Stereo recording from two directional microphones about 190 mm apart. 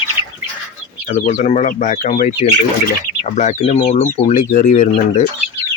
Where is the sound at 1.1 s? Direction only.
35° left (ahead or behind).